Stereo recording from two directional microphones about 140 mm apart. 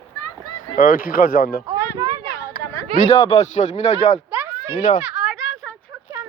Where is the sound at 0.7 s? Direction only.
80° left.